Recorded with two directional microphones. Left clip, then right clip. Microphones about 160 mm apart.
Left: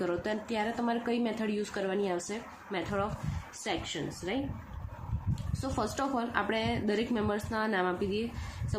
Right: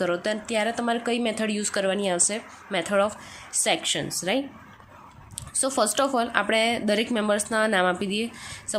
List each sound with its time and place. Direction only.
0.0 s speech: 25° right (ahead or behind); by 4.4 s 50° right (ahead or behind)
5.5 s speech: 35° right (ahead or behind)